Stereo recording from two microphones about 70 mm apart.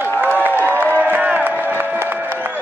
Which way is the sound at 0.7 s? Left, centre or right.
Right.